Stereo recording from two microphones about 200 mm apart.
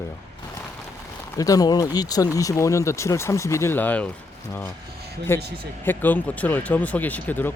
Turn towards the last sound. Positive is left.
turn(degrees=10)  # may be behind; listen again after turning